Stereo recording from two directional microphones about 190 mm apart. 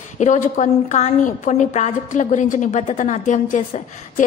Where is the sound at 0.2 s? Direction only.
40° left (ahead or behind).